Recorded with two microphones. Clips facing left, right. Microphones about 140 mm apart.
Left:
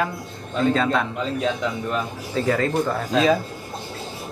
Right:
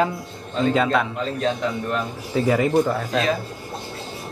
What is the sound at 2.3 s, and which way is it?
Speech, 10° right (ahead or behind).